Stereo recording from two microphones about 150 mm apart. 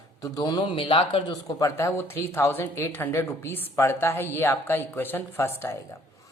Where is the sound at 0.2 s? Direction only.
25° left (ahead or behind).